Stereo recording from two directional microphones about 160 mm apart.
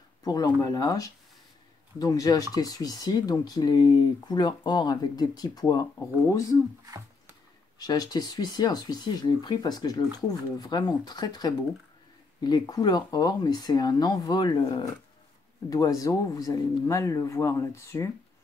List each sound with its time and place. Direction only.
0.2 s speech: 20° left (ahead or behind)
7.8 s speech: 25° left (ahead or behind)